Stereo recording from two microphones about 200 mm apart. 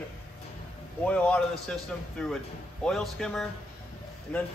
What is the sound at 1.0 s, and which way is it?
Speech, 5° left (ahead or behind).